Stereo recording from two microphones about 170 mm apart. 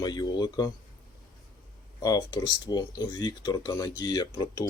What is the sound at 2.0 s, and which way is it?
Speech, 20° left (ahead or behind).